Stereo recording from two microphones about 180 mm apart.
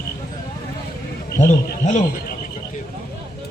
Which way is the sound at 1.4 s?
40° left (ahead or behind).